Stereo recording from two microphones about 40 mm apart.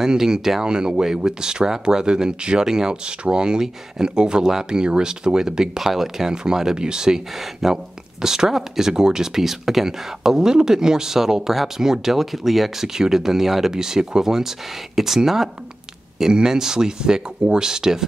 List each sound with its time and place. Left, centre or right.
0.0 s speech: centre